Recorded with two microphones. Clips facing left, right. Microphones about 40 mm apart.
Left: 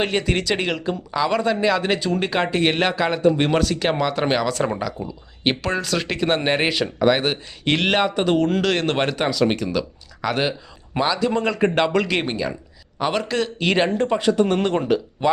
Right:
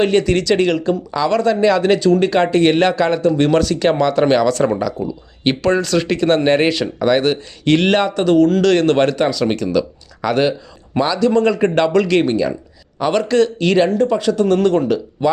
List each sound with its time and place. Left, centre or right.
0.0 s a man's voice: centre
13.7 s speech: centre